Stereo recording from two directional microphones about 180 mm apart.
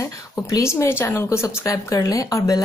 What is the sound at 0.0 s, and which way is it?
A woman's voice, 15° left (ahead or behind).